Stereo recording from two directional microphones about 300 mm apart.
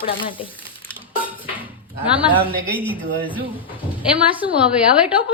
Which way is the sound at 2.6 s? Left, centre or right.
Centre.